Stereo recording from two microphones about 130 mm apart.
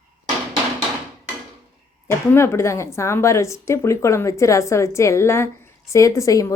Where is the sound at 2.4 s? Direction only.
20° left (ahead or behind).